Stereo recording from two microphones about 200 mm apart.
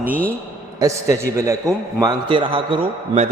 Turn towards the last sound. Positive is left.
turn(degrees=-30)  # may be behind; listen again after turning